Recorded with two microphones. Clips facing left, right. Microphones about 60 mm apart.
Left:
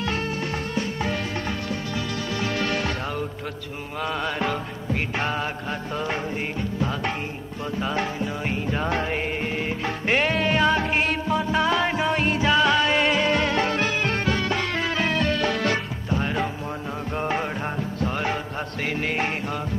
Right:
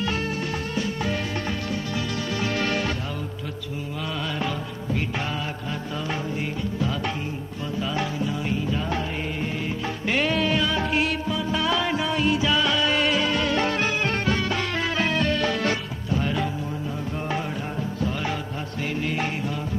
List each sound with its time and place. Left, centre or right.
4.3 s music: left
7.8 s music: left
12.2 s music: left
12.4 s music: left
17.1 s music: left